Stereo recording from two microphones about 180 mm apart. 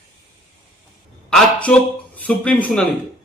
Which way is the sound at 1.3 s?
5° left (ahead or behind).